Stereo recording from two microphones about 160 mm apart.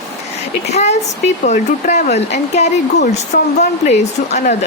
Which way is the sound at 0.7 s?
45° left (ahead or behind).